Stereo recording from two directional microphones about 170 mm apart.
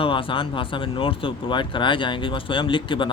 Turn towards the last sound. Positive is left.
turn(degrees=30)  # may be behind; listen again after turning